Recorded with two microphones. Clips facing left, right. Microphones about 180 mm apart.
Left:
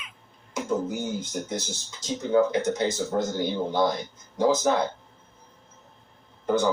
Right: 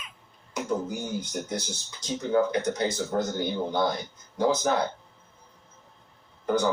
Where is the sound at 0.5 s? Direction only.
25° left (ahead or behind).